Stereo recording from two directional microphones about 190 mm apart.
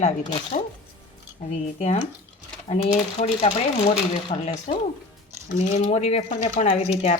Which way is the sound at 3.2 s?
30° left (ahead or behind).